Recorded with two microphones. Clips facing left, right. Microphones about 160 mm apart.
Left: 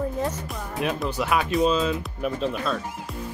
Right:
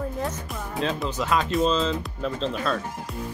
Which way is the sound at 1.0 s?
15° left (ahead or behind).